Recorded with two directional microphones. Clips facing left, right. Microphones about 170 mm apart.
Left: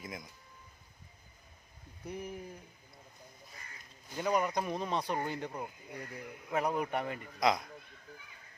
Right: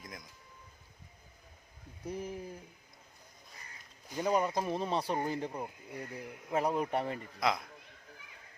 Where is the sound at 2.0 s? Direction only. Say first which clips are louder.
Right 2 dB; 30° right (ahead or behind).